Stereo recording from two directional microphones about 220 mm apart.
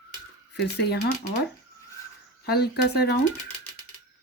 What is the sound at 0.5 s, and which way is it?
Speech, 50° left (ahead or behind).